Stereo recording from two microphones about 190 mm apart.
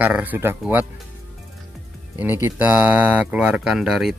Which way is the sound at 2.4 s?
10° right (ahead or behind).